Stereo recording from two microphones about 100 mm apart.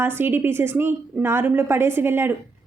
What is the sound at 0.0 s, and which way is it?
A woman's voice, 25° right (ahead or behind).